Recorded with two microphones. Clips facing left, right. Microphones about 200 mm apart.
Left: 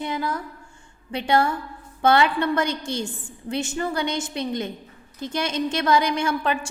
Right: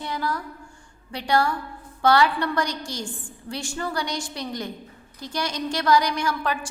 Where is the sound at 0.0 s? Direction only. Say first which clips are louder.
Left 2 dB; 20° left (ahead or behind).